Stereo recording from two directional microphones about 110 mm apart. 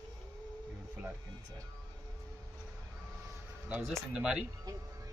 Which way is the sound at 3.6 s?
10° right (ahead or behind).